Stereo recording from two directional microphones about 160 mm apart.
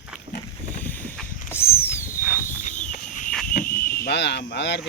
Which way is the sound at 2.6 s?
55° left (ahead or behind).